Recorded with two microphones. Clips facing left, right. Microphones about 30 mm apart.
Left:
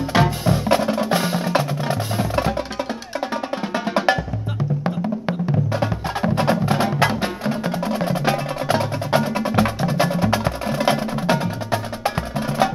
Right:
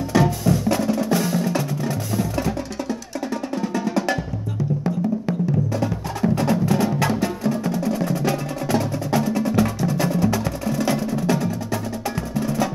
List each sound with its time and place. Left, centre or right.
0.1 s music: left
3.7 s percussion: left
5.7 s music: left